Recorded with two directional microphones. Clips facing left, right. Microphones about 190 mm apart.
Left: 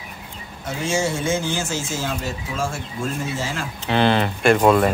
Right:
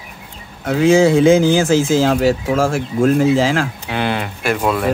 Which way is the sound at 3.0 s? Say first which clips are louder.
Right 14 dB; 80° right.